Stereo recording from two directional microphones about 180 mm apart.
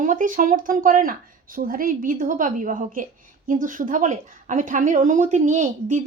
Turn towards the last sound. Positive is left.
turn(degrees=-45)  # may be behind; listen again after turning